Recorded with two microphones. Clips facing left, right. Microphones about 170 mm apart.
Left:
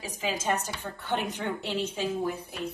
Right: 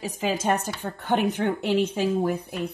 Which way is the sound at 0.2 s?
60° right (ahead or behind).